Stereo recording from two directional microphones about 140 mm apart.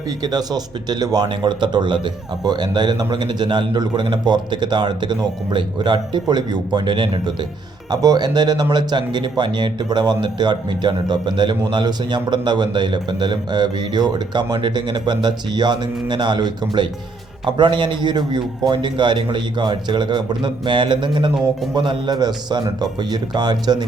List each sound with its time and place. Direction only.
0.2 s speech: 30° right (ahead or behind)